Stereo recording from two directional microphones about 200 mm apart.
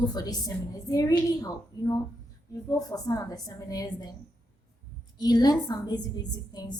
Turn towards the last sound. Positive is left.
turn(degrees=20)  # may be behind; listen again after turning